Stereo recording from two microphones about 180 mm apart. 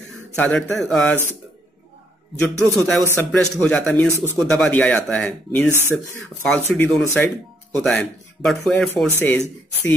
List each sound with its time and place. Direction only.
0.4 s speech: 5° left (ahead or behind)
2.5 s speech: 15° right (ahead or behind)
3.0 s speech: 5° left (ahead or behind)
5.7 s speech: 15° right (ahead or behind)
6.4 s speech: 5° left (ahead or behind)